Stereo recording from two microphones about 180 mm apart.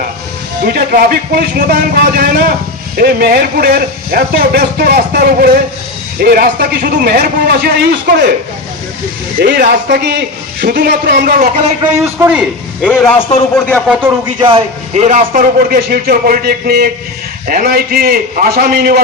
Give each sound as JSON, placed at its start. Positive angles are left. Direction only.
{"t": 0.6, "sound": "speech", "side_deg": -55}
{"t": 9.4, "sound": "speech", "side_deg": -60}
{"t": 12.0, "sound": "a man's voice", "side_deg": -10}
{"t": 12.8, "sound": "a man's voice", "side_deg": 5}
{"t": 13.8, "sound": "a man's voice", "side_deg": -5}
{"t": 14.3, "sound": "a man's voice", "side_deg": -30}